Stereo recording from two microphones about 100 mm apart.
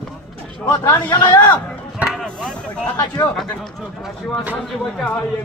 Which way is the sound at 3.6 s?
5° right (ahead or behind).